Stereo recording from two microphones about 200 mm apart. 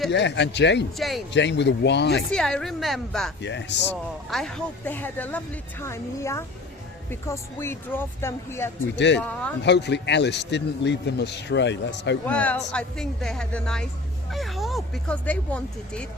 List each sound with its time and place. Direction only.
0.1 s speech: 60° left (ahead or behind)
0.9 s speech: centre (ahead or behind)
1.3 s speech: 60° left (ahead or behind)
2.3 s speech: 5° left (ahead or behind)
3.4 s speech: 60° left (ahead or behind)
3.8 s speech: centre (ahead or behind)
9.6 s speech: 60° left (ahead or behind)
12.2 s speech: 5° left (ahead or behind)